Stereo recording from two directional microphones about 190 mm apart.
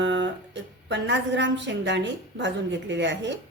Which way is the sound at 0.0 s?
75° right (ahead or behind).